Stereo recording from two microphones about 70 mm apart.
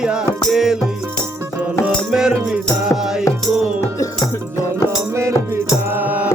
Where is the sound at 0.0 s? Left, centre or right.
Centre.